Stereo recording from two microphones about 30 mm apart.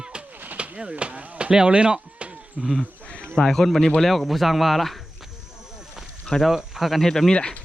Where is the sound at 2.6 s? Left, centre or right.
Right.